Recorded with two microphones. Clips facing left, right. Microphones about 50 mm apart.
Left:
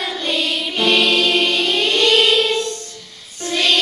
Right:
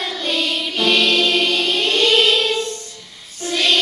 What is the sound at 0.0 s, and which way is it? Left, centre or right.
Music, centre.